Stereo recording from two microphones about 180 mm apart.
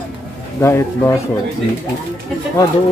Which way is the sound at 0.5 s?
15° left (ahead or behind).